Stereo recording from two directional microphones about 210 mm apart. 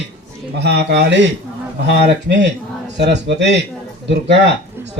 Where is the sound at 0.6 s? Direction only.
50° right (ahead or behind).